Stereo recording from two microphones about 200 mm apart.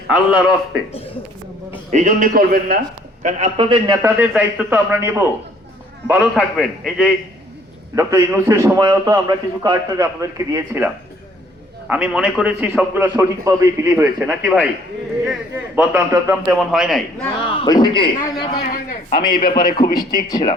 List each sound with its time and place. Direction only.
0.1 s a man's voice: 5° right (ahead or behind)
1.9 s a man's voice: 40° right (ahead or behind)
3.2 s a man's voice: 35° right (ahead or behind)
3.9 s a man's voice: 10° right (ahead or behind)
7.9 s a man's voice: 15° right (ahead or behind)
11.9 s a man's voice: 5° right (ahead or behind)
16.7 s a man's voice: centre (ahead or behind)
17.6 s a man's voice: 20° left (ahead or behind)
19.1 s a man's voice: 25° left (ahead or behind)